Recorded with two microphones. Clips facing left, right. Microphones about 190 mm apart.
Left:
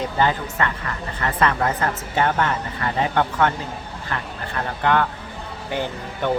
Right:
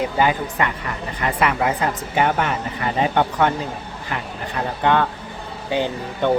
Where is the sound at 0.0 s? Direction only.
15° right (ahead or behind).